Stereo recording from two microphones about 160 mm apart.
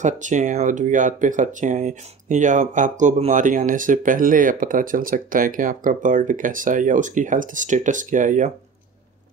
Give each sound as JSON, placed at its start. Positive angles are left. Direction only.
{"t": 0.0, "sound": "speech", "side_deg": -50}